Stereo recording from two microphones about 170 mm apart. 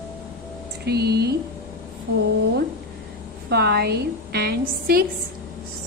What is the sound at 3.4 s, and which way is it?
A woman's voice, 70° right (ahead or behind).